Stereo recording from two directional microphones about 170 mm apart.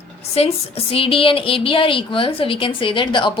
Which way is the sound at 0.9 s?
30° left (ahead or behind).